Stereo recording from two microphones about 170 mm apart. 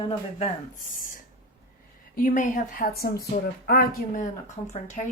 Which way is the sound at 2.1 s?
55° left (ahead or behind).